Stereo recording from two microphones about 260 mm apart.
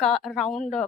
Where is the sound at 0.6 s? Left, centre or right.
Left.